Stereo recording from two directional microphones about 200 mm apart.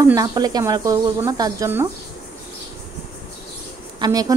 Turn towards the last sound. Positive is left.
turn(degrees=-20)  # may be behind; listen again after turning